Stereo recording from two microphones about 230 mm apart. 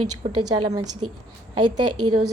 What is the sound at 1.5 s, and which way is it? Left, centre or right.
Speech, right.